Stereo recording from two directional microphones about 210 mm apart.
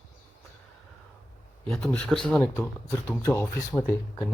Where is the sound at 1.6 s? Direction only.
5° left (ahead or behind).